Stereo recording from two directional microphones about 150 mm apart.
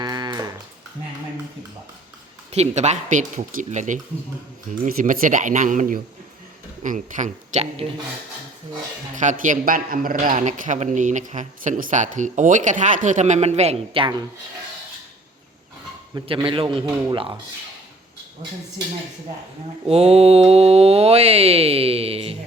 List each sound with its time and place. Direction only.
0.0 s a sound: 25° right (ahead or behind)
2.5 s speech: 50° right (ahead or behind)
4.7 s a man's voice: 65° right (ahead or behind); by 7.9 s 45° right (ahead or behind)
9.1 s a man's voice: 55° right (ahead or behind); by 14.2 s 35° right (ahead or behind)
16.2 s speech: 35° right (ahead or behind)
19.9 s speech: 45° right (ahead or behind)